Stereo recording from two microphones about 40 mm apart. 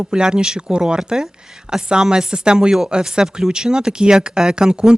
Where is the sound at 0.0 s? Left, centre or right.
Right.